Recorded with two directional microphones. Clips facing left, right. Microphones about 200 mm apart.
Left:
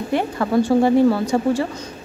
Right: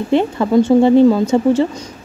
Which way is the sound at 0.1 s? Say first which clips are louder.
Right 6 dB; 25° right (ahead or behind).